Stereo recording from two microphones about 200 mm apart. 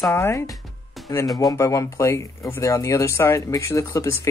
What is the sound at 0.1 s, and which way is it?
Speech, 15° left (ahead or behind).